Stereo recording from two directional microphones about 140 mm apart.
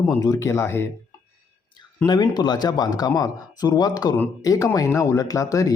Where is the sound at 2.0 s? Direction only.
30° left (ahead or behind).